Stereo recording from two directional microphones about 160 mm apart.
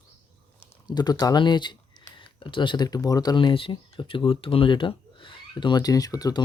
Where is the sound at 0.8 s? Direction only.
25° left (ahead or behind).